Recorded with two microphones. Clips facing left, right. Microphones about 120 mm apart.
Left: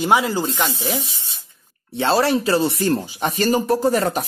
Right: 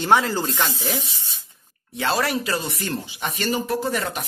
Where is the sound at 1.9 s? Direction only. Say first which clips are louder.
Left 5 dB; 30° left (ahead or behind).